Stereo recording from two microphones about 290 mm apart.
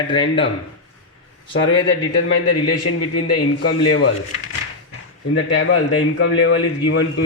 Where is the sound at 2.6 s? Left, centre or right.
Left.